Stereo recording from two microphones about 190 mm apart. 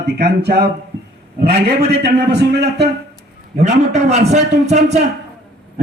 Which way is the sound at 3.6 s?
35° right (ahead or behind).